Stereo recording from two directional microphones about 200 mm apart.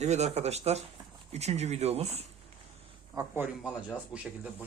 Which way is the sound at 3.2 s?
10° right (ahead or behind).